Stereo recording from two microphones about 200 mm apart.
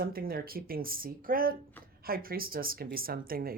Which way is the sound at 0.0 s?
50° right (ahead or behind).